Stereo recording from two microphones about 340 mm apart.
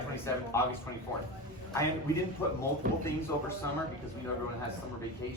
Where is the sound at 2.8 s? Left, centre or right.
Right.